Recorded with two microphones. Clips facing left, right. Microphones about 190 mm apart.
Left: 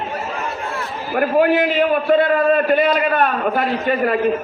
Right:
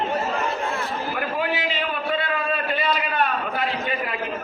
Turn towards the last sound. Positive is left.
turn(degrees=50)  # may be behind; listen again after turning